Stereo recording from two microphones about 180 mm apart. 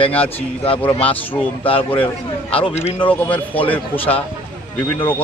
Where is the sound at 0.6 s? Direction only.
30° left (ahead or behind).